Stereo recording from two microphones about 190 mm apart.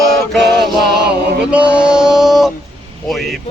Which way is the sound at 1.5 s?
5° right (ahead or behind).